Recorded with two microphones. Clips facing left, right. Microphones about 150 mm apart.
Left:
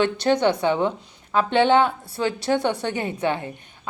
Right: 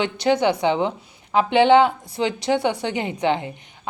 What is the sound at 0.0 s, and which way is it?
Speech, 15° right (ahead or behind).